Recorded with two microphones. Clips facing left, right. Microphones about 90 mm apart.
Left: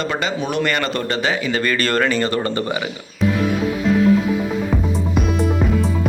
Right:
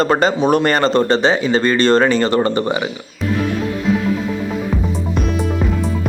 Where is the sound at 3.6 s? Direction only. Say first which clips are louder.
Left 1 dB; centre (ahead or behind).